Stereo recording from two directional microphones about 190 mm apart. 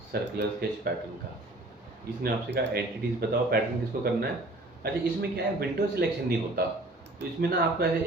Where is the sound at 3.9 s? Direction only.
45° right (ahead or behind).